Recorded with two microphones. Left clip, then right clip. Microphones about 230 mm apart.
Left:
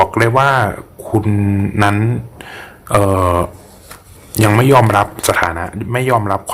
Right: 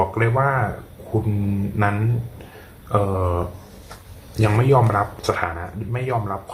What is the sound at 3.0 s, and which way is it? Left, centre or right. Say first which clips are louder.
A man's voice: left 9 dB; left.